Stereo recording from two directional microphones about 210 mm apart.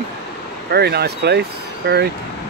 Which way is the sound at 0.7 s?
50° right (ahead or behind).